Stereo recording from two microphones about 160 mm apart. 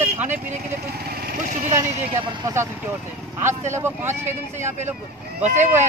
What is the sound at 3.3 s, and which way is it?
Speech, 15° right (ahead or behind).